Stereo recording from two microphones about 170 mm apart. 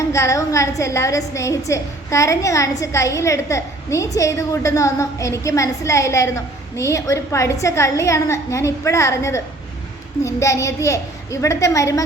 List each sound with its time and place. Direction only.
0.1 s a woman's voice: 15° left (ahead or behind)